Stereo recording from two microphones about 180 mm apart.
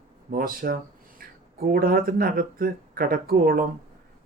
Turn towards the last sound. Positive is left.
turn(degrees=-55)  # may be behind; listen again after turning